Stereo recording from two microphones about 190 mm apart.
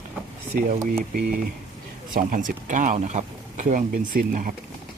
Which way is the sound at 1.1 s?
50° right (ahead or behind).